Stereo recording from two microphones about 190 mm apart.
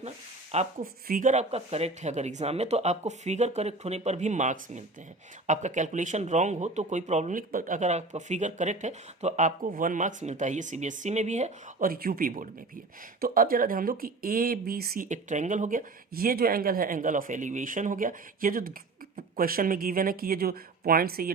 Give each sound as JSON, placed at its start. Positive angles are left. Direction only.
{"t": 0.8, "sound": "speech", "side_deg": -50}